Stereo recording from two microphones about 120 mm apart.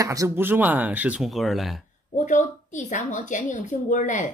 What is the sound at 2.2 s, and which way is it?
A woman's voice, 90° left.